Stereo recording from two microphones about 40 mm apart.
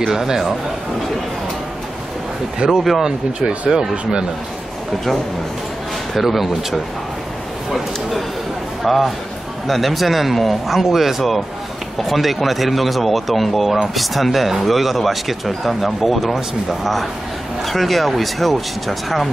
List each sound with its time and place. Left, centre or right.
0.0 s speech: centre
2.8 s speech: centre
3.3 s speech: centre
6.1 s speech: centre
8.8 s speech: centre